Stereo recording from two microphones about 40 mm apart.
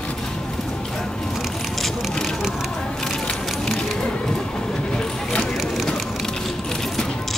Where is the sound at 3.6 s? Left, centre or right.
Centre.